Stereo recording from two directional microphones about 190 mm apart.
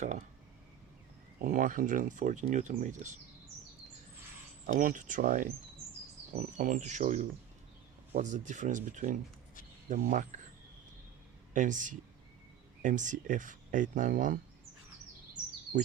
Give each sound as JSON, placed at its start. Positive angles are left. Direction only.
{"t": 1.4, "sound": "speech", "side_deg": -45}
{"t": 4.6, "sound": "speech", "side_deg": -45}
{"t": 11.5, "sound": "speech", "side_deg": -40}